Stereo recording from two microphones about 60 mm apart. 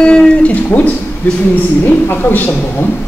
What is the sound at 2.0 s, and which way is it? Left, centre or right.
Speech, left.